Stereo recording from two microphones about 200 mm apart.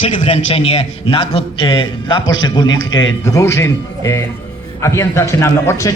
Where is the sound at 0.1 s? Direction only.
35° left (ahead or behind).